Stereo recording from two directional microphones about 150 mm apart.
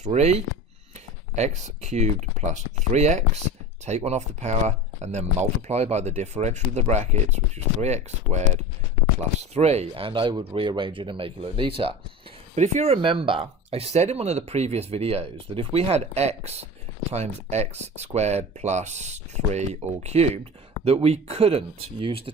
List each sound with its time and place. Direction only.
0.0 s speech: 45° right (ahead or behind)
12.5 s speech: 50° right (ahead or behind)